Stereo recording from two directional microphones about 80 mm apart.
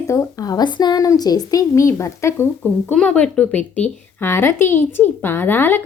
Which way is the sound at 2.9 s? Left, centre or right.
Centre.